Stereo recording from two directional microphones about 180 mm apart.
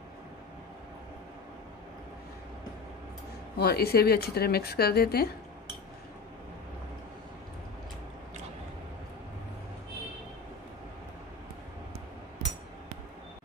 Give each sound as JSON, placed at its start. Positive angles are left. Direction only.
{"t": 3.5, "sound": "speech", "side_deg": 60}